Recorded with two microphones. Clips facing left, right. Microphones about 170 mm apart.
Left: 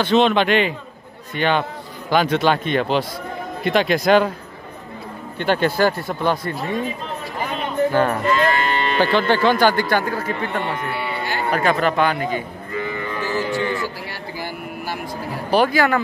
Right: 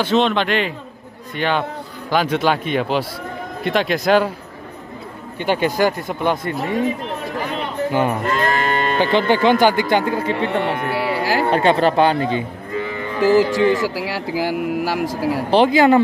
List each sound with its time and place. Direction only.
0.0 s speech: centre (ahead or behind)
5.4 s speech: 10° right (ahead or behind)
7.9 s speech: 15° right (ahead or behind)
8.3 s livestock: 50° right (ahead or behind)
9.0 s speech: 20° right (ahead or behind)
10.6 s speech: 90° right
11.5 s speech: 30° right (ahead or behind)
13.2 s speech: 90° right
15.5 s speech: 20° right (ahead or behind)